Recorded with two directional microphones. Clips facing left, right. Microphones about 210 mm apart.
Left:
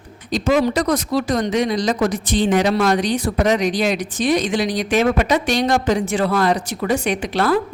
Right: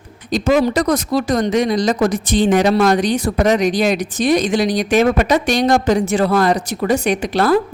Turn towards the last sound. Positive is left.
turn(degrees=-40)  # may be behind; listen again after turning